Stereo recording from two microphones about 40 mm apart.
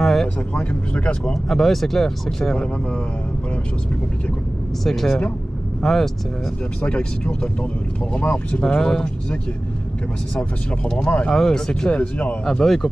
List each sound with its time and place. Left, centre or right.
0.0 s a sound: centre
0.6 s speech: left
1.3 s speech: centre
2.5 s speech: left
4.8 s speech: centre
6.9 s speech: left
11.0 s speech: left
11.2 s speech: centre
12.0 s speech: left
12.4 s speech: centre